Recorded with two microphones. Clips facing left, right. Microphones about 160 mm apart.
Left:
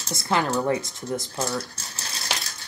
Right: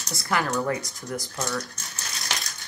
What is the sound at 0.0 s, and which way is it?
A woman's voice, 25° left (ahead or behind).